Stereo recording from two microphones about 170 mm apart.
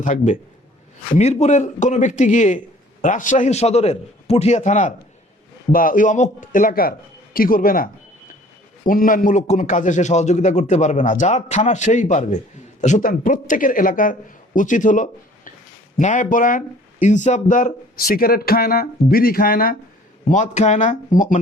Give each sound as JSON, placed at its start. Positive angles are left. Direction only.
{"t": 0.0, "sound": "a man's voice", "side_deg": 45}
{"t": 8.9, "sound": "a man's voice", "side_deg": 55}
{"t": 20.3, "sound": "a man's voice", "side_deg": 45}